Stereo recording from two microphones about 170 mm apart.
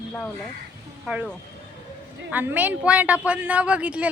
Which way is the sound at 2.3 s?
10° right (ahead or behind).